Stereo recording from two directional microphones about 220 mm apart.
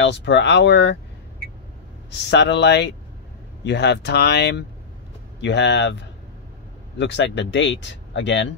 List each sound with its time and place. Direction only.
0.0 s speech: 55° left (ahead or behind)
2.2 s speech: 50° left (ahead or behind)